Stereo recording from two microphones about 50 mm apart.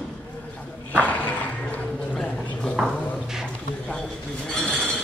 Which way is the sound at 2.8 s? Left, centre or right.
Centre.